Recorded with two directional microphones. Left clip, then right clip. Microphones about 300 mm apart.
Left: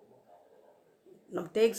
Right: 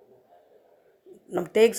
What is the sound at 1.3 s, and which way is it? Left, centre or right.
Speech, centre.